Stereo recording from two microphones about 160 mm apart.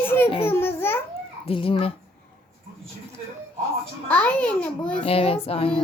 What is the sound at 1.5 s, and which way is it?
Speech, 35° left (ahead or behind).